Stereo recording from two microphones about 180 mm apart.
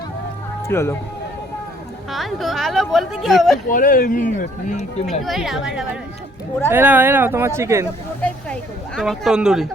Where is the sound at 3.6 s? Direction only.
50° left (ahead or behind).